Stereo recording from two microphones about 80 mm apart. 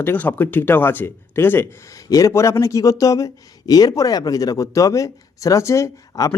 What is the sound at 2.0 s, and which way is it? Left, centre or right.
Speech, left.